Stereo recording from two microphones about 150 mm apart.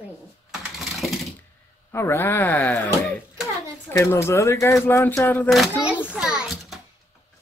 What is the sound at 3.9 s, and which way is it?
Speech, 15° left (ahead or behind).